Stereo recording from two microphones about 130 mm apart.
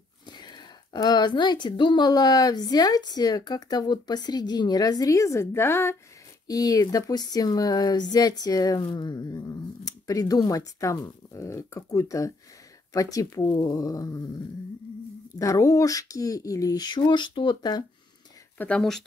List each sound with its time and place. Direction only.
0.3 s speech: 35° left (ahead or behind)
15.3 s speech: 25° left (ahead or behind)
18.6 s speech: 5° left (ahead or behind)